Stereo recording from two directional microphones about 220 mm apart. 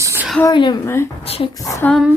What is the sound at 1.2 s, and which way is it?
Speech, 25° left (ahead or behind).